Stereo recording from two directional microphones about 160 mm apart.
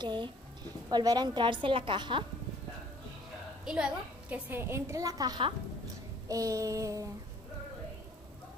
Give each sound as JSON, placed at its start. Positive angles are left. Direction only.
{"t": 0.0, "sound": "a woman's voice", "side_deg": -30}
{"t": 3.6, "sound": "a woman's voice", "side_deg": -5}